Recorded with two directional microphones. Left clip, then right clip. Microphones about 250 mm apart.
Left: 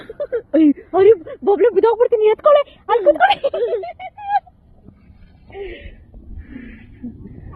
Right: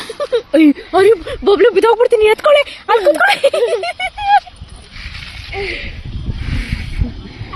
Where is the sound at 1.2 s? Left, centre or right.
Centre.